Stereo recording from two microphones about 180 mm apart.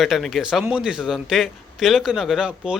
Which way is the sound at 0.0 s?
Centre (ahead or behind).